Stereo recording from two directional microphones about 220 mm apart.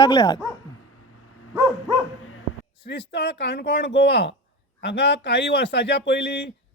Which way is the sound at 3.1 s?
50° left (ahead or behind).